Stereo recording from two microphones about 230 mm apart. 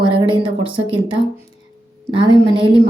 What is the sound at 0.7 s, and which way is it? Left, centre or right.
A woman's voice, right.